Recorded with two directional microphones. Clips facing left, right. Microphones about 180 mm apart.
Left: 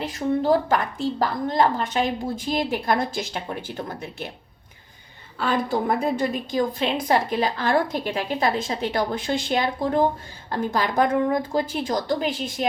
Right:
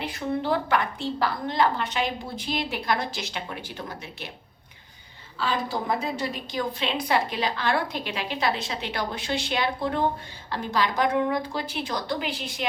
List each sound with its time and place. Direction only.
0.0 s a woman's voice: 45° left (ahead or behind)
5.4 s a woman's voice: 55° left (ahead or behind)